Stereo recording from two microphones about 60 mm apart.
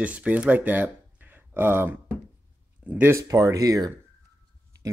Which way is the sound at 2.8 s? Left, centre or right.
Right.